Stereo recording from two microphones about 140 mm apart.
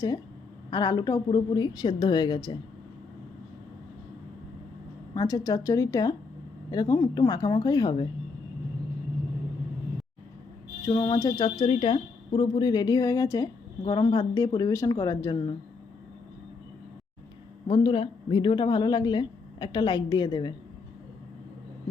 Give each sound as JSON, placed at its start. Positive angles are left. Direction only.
{"t": 0.7, "sound": "speech", "side_deg": 30}
{"t": 5.1, "sound": "speech", "side_deg": 25}
{"t": 10.8, "sound": "speech", "side_deg": 30}
{"t": 17.7, "sound": "speech", "side_deg": 35}